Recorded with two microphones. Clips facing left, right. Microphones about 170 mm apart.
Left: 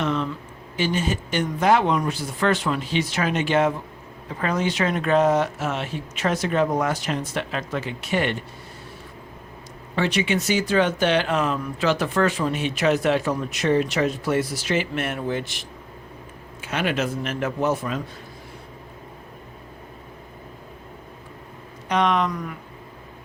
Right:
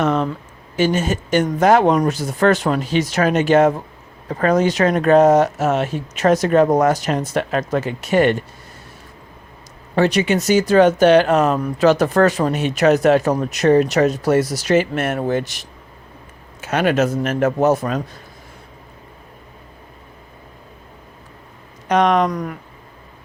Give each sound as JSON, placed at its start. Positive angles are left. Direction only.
{"t": 0.0, "sound": "a sound", "side_deg": -45}
{"t": 0.8, "sound": "speech", "side_deg": -45}
{"t": 9.9, "sound": "speech", "side_deg": -45}
{"t": 21.8, "sound": "speech", "side_deg": -45}